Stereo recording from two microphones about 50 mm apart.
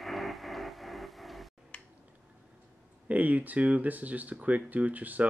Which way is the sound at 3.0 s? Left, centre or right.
Right.